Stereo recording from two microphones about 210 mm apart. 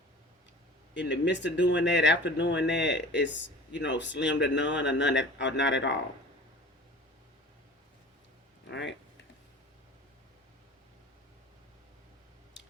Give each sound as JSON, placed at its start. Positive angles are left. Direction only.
{"t": 0.9, "sound": "speech", "side_deg": 60}
{"t": 8.6, "sound": "speech", "side_deg": 60}